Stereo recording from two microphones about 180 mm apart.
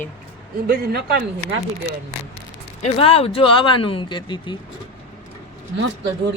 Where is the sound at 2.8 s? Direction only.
35° left (ahead or behind).